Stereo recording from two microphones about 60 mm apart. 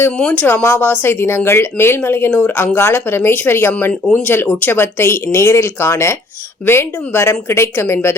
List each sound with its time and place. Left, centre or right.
0.3 s speech: left
4.7 s speech: left